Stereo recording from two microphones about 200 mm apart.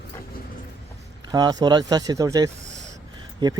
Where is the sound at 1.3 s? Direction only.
20° right (ahead or behind).